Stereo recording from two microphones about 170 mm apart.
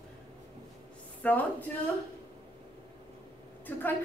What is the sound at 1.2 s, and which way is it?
Speech, 10° left (ahead or behind).